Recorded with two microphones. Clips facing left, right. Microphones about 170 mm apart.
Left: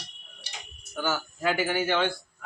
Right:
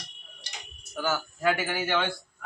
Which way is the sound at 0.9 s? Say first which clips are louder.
Even; centre (ahead or behind).